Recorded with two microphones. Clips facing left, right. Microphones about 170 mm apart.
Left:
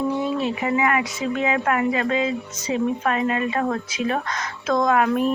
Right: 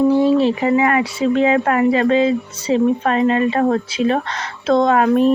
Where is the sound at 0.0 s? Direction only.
30° right (ahead or behind).